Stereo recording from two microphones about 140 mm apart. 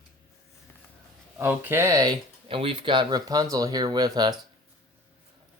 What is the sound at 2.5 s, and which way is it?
Speech, 40° right (ahead or behind).